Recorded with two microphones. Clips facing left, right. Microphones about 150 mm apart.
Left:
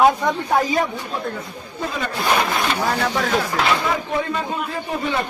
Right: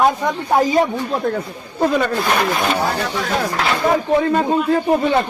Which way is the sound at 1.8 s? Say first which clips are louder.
Right 10 dB; 65° right (ahead or behind).